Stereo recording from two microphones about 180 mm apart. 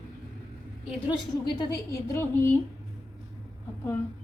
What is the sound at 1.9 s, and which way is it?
Speech, 15° left (ahead or behind).